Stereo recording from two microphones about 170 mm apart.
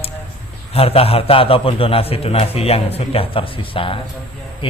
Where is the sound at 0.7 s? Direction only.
35° left (ahead or behind).